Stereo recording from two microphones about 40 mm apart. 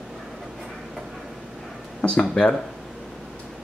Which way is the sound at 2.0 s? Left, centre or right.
Left.